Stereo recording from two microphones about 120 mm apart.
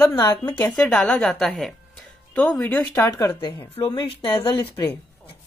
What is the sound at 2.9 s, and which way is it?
Speech, 25° left (ahead or behind).